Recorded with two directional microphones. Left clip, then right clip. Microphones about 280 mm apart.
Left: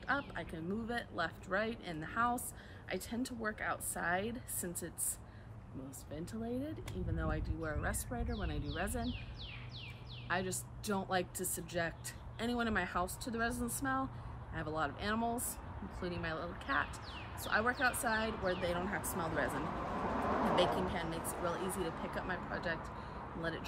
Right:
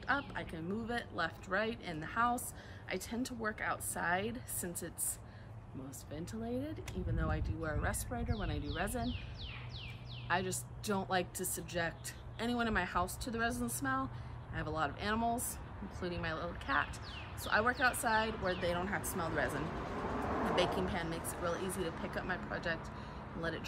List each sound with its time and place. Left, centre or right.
0.0 s speech: centre
6.1 s speech: centre
10.2 s speech: centre
20.5 s speech: centre
21.5 s speech: left
21.8 s speech: centre